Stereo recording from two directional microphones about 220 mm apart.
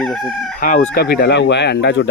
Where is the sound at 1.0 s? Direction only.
45° left (ahead or behind).